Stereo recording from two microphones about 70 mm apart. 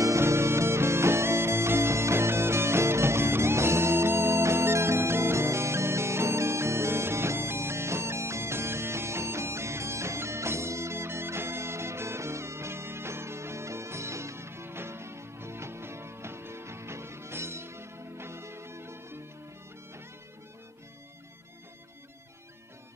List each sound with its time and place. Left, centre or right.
0.0 s music: right